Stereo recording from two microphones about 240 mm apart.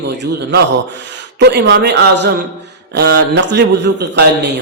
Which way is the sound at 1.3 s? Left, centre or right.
Right.